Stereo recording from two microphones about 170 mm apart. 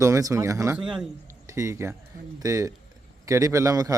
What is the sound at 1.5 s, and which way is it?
A man's voice, 15° right (ahead or behind).